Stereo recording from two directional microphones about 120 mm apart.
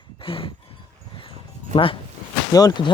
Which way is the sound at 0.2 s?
50° left (ahead or behind).